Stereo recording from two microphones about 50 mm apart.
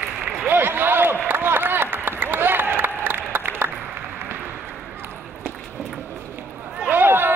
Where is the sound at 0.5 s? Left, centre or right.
Right.